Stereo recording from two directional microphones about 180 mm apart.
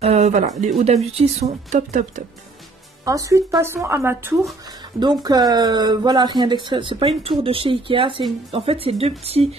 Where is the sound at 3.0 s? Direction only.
20° right (ahead or behind).